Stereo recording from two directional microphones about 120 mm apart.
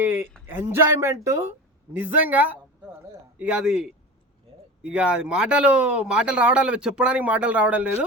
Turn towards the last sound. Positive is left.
turn(degrees=-10)  # may be behind; listen again after turning